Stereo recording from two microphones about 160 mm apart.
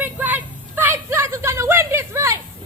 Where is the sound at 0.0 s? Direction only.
10° right (ahead or behind).